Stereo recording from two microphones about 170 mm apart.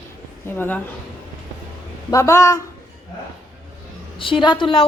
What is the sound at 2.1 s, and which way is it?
Speech, 15° left (ahead or behind).